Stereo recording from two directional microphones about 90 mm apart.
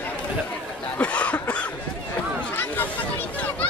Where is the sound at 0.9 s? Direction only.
15° left (ahead or behind).